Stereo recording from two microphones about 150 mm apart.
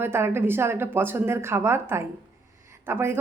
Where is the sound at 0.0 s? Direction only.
15° right (ahead or behind).